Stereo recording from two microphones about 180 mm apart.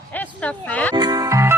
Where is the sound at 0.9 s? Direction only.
20° right (ahead or behind).